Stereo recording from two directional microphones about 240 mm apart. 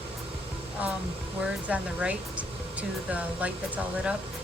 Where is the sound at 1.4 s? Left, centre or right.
Centre.